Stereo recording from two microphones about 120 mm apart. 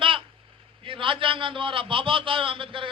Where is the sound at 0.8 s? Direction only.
45° right (ahead or behind).